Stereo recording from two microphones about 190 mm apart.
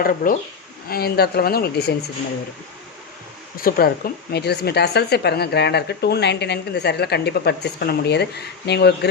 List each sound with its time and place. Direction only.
0.0 s speech: 50° left (ahead or behind)
3.6 s speech: 50° left (ahead or behind)